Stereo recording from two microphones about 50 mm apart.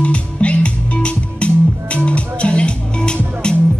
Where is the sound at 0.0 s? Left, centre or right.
Left.